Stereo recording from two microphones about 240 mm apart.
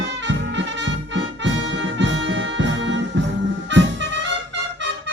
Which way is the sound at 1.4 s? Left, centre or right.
Right.